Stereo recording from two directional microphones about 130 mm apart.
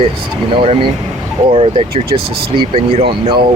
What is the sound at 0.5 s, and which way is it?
Speech, 45° right (ahead or behind).